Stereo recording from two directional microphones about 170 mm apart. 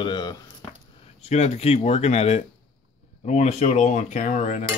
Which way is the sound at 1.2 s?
40° left (ahead or behind).